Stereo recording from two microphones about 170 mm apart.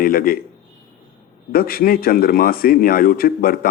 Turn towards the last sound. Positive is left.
turn(degrees=60)  # may be behind; listen again after turning